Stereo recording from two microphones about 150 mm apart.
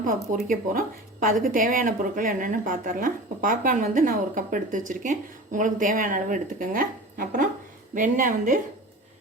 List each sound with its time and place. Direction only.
0.0 s a woman's voice: 65° right (ahead or behind)